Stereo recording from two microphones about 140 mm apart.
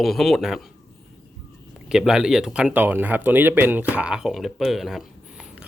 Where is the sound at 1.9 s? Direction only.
5° right (ahead or behind).